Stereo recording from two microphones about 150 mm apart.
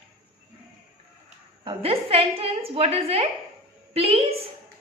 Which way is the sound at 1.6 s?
40° right (ahead or behind).